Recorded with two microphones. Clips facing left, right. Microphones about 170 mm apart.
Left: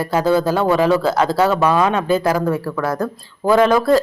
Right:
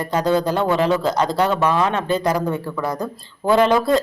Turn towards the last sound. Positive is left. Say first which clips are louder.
# left 2 dB
turn(degrees=0)  # may be behind; listen again after turning